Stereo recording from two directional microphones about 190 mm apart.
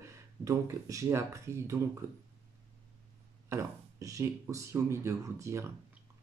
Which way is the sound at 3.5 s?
15° right (ahead or behind).